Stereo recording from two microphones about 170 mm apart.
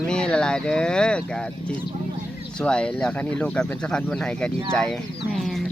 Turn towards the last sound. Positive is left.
turn(degrees=0)  # may be behind; listen again after turning